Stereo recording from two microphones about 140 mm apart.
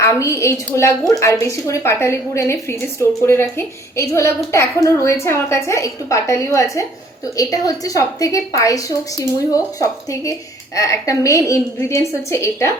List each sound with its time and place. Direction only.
0.0 s a woman's voice: 20° left (ahead or behind)